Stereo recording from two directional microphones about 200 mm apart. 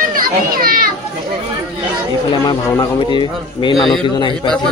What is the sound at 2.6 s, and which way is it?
Speech, 10° left (ahead or behind).